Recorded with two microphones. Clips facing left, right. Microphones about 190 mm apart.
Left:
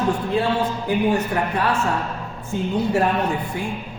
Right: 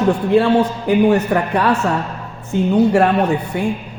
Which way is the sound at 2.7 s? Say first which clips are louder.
Right 7 dB; 70° right (ahead or behind).